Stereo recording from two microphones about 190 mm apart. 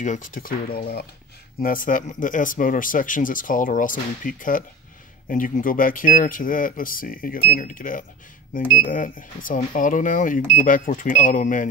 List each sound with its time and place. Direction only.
0.0 s speech: 40° left (ahead or behind)